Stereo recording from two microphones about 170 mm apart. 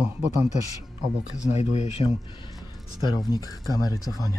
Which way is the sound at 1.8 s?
35° left (ahead or behind).